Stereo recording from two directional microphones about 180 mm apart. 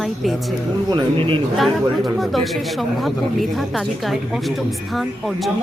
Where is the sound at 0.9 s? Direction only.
30° right (ahead or behind).